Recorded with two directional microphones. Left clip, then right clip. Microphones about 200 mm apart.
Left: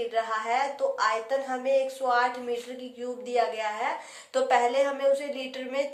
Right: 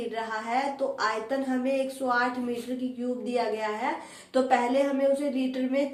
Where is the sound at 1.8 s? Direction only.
45° left (ahead or behind).